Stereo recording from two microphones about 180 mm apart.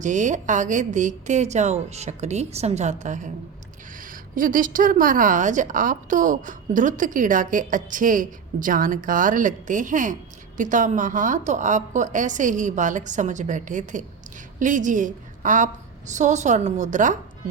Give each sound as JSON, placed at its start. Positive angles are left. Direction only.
{"t": 0.0, "sound": "a woman's voice", "side_deg": -45}